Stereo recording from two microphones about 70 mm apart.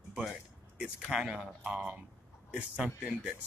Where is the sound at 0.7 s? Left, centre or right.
Centre.